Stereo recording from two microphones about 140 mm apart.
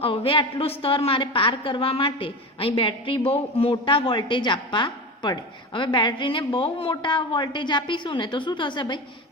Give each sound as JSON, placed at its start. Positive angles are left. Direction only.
{"t": 0.0, "sound": "a woman's voice", "side_deg": 40}